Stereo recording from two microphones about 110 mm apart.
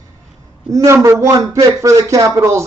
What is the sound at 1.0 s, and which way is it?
Speech, 30° right (ahead or behind).